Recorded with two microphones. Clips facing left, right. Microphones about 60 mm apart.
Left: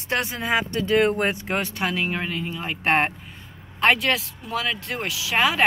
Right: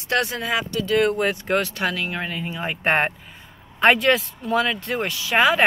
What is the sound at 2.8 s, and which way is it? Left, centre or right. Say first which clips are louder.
Speech: even; centre.